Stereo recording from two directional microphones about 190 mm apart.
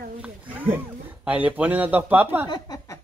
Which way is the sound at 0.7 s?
10° right (ahead or behind).